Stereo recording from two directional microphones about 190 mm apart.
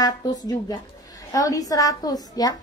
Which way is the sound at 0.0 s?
20° left (ahead or behind).